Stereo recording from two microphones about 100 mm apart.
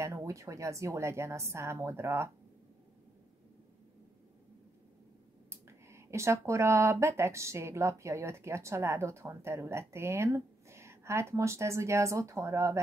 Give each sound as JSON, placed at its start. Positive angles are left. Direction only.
{"t": 0.0, "sound": "speech", "side_deg": -30}
{"t": 5.5, "sound": "speech", "side_deg": -25}